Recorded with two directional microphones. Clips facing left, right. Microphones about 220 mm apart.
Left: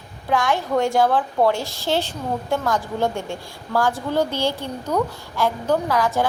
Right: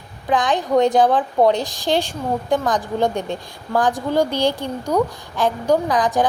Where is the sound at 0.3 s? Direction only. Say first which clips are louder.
Right 2 dB; 15° right (ahead or behind).